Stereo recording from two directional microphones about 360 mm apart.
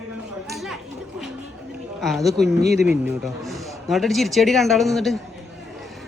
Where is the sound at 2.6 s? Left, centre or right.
Right.